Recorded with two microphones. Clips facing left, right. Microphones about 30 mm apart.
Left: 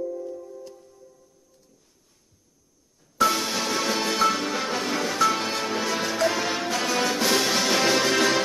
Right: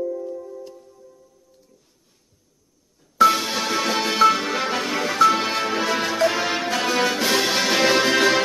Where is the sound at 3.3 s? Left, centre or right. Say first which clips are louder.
Right 3 dB; centre.